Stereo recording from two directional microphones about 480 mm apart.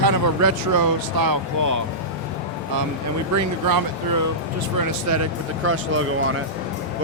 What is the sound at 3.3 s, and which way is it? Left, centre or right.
Speech, right.